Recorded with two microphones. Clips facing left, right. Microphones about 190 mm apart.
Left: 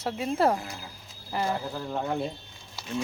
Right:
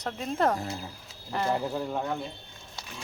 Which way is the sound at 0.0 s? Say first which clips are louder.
Left 2 dB; 5° left (ahead or behind).